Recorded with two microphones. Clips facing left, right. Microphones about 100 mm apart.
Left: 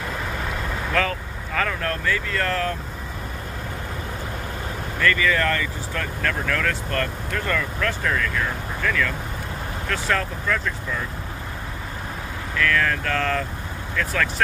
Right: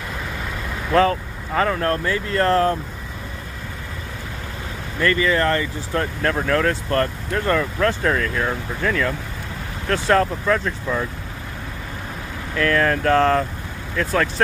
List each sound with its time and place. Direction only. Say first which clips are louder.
0.9 s speech: right 9 dB; 30° right (ahead or behind)
5.0 s speech: right 3 dB; 30° right (ahead or behind)
12.5 s speech: right 4 dB; 35° right (ahead or behind)